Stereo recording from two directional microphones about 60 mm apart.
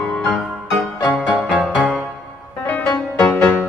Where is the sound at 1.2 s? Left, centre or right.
Right.